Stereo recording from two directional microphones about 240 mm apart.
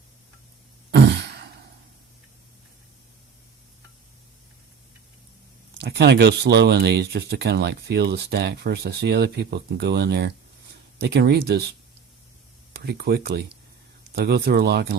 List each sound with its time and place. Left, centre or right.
0.9 s throat clearing: right
5.7 s speech: right
12.7 s speech: right